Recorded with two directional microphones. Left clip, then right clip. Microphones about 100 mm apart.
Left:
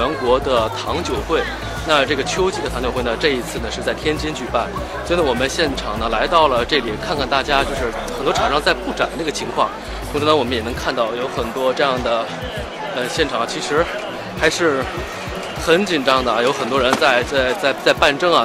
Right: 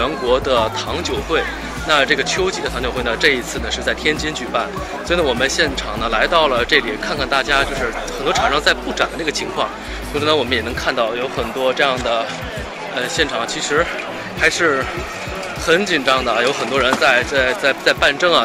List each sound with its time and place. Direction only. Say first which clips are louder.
0.0 s speech: even; 35° left (ahead or behind)
11.7 s speech: right 1 dB; 50° left (ahead or behind)
12.9 s speech: right 1 dB; 30° left (ahead or behind)
14.4 s speech: right 1 dB; 55° left (ahead or behind)